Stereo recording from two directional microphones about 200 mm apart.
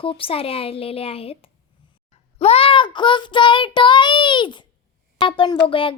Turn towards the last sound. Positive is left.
turn(degrees=25)  # may be behind; listen again after turning